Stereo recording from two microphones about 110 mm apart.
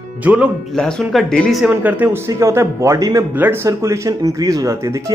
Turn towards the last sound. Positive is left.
turn(degrees=-30)  # may be behind; listen again after turning